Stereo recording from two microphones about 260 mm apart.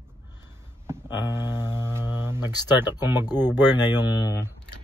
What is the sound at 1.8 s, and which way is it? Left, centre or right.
Mantra, centre.